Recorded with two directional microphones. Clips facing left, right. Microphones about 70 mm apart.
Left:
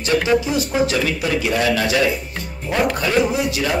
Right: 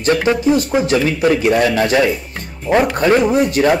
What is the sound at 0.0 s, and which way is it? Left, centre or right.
Speech, right.